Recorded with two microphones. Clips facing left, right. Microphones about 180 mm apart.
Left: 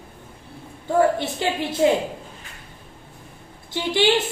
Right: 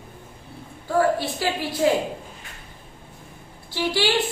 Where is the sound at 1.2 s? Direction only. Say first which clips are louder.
Left 1 dB; 20° left (ahead or behind).